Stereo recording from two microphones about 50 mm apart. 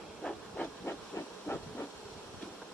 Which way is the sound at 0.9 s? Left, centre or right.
Left.